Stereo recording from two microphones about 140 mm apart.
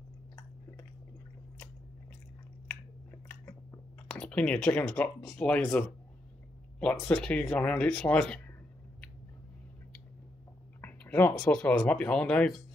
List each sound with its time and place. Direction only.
3.1 s biting: 20° left (ahead or behind)
4.1 s speech: 5° left (ahead or behind)
10.8 s a sound: 15° left (ahead or behind)
11.3 s speech: 5° left (ahead or behind)